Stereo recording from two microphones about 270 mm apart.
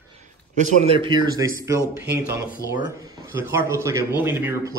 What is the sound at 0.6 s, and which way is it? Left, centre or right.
A man's voice, centre.